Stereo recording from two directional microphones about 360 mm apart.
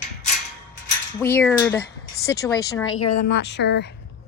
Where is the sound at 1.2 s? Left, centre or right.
Centre.